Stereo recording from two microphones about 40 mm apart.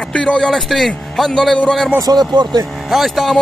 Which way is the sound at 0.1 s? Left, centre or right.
Left.